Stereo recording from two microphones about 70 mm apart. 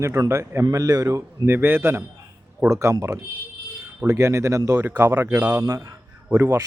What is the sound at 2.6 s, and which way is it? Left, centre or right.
Speech, right.